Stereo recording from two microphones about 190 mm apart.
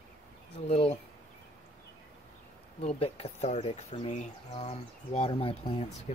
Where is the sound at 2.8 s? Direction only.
30° left (ahead or behind).